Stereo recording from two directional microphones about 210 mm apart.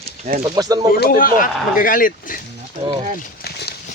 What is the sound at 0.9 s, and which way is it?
Speech, 45° left (ahead or behind).